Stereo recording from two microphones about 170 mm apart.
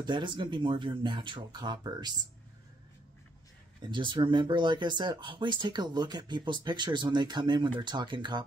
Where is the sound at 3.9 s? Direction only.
25° right (ahead or behind).